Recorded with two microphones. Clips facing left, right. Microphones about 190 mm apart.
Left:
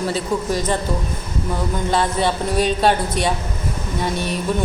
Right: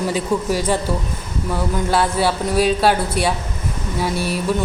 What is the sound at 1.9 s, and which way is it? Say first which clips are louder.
A woman's voice: right 1 dB; 5° right (ahead or behind).